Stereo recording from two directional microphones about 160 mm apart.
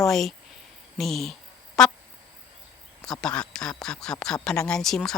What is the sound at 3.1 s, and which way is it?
Speech, 5° left (ahead or behind).